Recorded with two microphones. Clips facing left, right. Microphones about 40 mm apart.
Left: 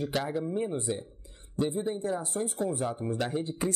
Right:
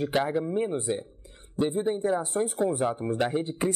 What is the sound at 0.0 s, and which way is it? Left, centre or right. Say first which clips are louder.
Speech: right 5 dB; right.